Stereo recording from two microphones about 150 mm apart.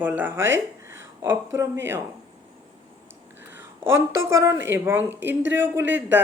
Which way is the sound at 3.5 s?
15° right (ahead or behind).